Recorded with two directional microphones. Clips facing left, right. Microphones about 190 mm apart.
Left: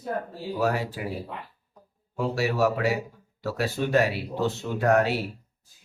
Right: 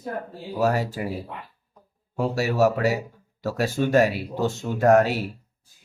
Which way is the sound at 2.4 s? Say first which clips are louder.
Right 3 dB; 45° right (ahead or behind).